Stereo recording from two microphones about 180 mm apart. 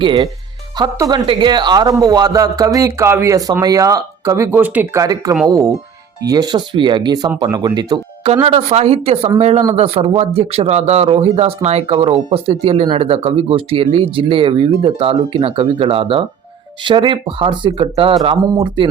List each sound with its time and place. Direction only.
0.0 s speech: 25° right (ahead or behind)
8.3 s speech: 35° right (ahead or behind)
18.4 s speech: 15° right (ahead or behind)